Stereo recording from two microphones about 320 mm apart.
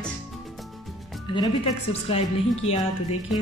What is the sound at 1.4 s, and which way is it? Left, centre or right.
Speech, centre.